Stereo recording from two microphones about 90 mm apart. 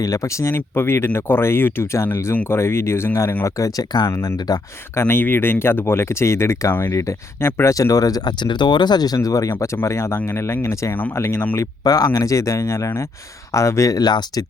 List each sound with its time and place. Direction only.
0.0 s speech: 35° left (ahead or behind)
4.9 s speech: 25° left (ahead or behind)
11.5 s speech: 40° left (ahead or behind)